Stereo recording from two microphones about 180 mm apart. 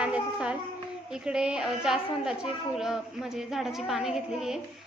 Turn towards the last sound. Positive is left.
turn(degrees=0)  # may be behind; listen again after turning